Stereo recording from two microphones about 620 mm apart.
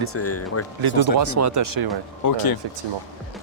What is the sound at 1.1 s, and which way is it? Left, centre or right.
Speech, right.